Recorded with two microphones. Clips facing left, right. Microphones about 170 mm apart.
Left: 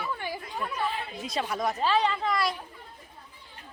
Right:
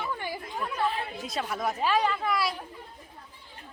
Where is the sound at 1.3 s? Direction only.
Centre (ahead or behind).